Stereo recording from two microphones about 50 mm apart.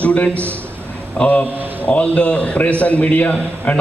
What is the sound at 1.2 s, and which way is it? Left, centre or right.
A man's voice, left.